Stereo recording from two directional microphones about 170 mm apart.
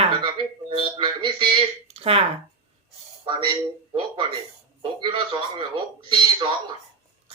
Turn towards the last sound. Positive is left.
turn(degrees=-30)  # may be behind; listen again after turning